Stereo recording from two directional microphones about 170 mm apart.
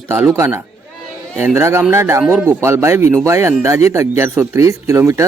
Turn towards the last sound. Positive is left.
turn(degrees=-20)  # may be behind; listen again after turning